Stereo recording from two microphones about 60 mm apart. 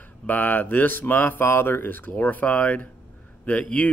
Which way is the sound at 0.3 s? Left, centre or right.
Left.